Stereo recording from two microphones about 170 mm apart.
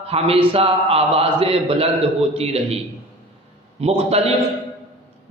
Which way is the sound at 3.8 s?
35° right (ahead or behind).